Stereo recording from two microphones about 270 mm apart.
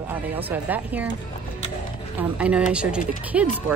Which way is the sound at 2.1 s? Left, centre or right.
Centre.